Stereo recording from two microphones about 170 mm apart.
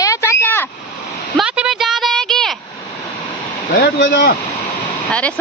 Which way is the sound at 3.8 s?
80° left.